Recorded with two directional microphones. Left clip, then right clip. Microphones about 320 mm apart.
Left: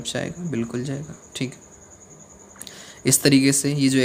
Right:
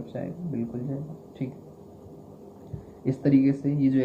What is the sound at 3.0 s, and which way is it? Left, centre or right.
Speech, left.